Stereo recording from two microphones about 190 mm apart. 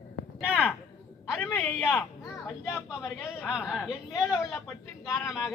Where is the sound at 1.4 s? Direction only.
10° left (ahead or behind).